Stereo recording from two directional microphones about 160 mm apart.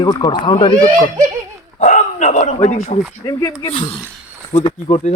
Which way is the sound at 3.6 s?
45° left (ahead or behind).